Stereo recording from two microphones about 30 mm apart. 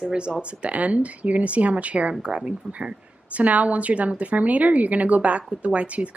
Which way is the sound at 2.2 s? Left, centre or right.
Right.